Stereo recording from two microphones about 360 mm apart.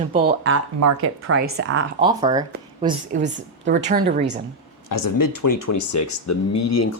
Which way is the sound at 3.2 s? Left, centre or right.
Right.